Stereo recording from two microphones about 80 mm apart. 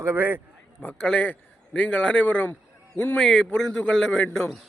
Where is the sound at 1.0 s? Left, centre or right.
Centre.